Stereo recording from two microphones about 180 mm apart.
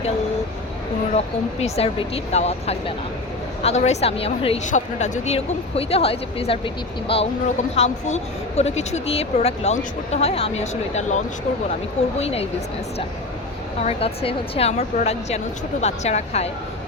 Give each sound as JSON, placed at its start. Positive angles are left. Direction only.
{"t": 1.1, "sound": "speech", "side_deg": 35}
{"t": 12.2, "sound": "speech", "side_deg": 35}
{"t": 13.8, "sound": "speech", "side_deg": 35}